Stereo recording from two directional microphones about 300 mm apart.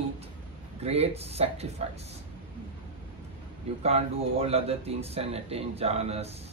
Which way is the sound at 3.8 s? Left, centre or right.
Centre.